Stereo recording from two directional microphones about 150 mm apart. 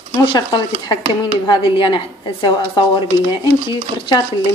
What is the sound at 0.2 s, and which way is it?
Speech, 30° left (ahead or behind).